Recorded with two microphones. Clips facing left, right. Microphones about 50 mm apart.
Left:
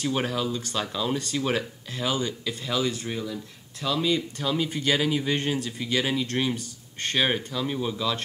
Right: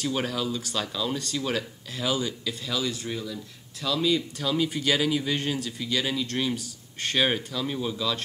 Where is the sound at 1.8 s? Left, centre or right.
Centre.